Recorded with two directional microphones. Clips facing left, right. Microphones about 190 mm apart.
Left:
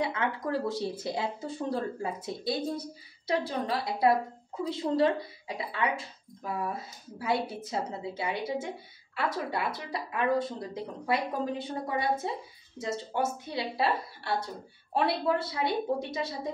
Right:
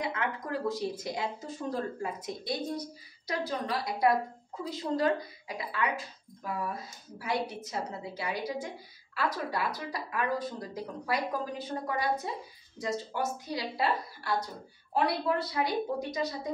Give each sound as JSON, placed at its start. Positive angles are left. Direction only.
{"t": 0.0, "sound": "speech", "side_deg": 30}